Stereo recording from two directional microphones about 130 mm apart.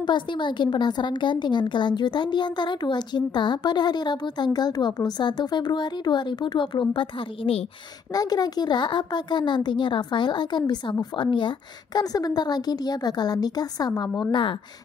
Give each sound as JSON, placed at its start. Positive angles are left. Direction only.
{"t": 0.0, "sound": "a woman's voice", "side_deg": 35}
{"t": 8.1, "sound": "a woman's voice", "side_deg": 30}